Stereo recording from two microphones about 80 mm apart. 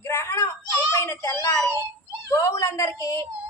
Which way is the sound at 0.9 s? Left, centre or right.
Left.